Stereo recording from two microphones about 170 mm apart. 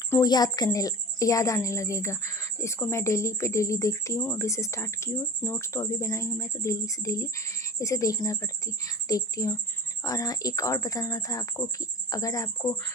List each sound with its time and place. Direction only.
0.1 s a woman's voice: 20° left (ahead or behind)